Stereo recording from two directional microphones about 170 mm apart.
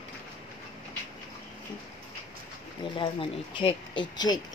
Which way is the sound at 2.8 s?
30° left (ahead or behind).